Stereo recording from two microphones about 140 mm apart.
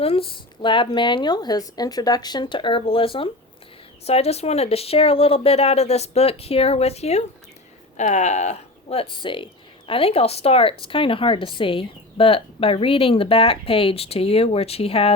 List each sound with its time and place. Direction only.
0.0 s speech: 40° left (ahead or behind)